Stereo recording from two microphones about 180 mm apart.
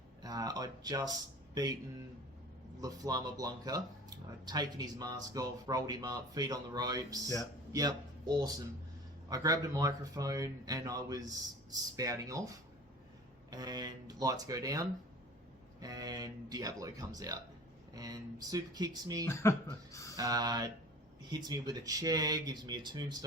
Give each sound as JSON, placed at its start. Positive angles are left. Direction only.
{"t": 0.2, "sound": "speech", "side_deg": -20}
{"t": 2.8, "sound": "speech", "side_deg": -20}
{"t": 13.5, "sound": "speech", "side_deg": -20}
{"t": 19.2, "sound": "speech", "side_deg": 15}
{"t": 20.1, "sound": "speech", "side_deg": -20}